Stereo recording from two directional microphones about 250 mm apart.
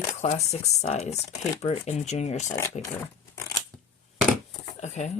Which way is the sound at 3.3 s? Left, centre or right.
Centre.